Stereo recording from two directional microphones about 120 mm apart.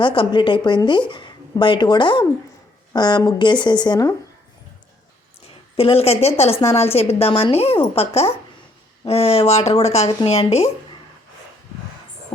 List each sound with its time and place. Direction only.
0.0 s a woman's voice: 45° left (ahead or behind)
5.5 s a woman's voice: 55° left (ahead or behind)